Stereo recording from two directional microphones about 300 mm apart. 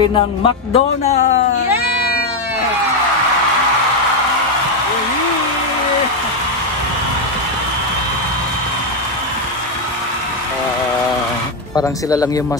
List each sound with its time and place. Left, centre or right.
0.4 s speech: centre
11.7 s speech: centre